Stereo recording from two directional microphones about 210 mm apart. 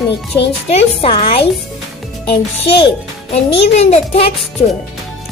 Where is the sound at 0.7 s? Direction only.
25° left (ahead or behind).